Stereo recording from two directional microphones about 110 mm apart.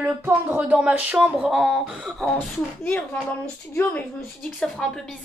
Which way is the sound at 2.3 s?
20° left (ahead or behind).